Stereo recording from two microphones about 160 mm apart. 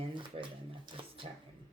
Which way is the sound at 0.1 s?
30° right (ahead or behind).